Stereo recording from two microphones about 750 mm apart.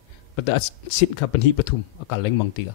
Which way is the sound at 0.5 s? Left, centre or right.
Left.